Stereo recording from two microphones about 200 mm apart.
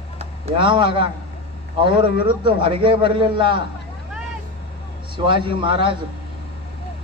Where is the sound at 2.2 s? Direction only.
25° right (ahead or behind).